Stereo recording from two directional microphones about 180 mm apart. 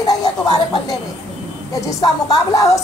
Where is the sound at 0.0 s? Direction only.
20° left (ahead or behind).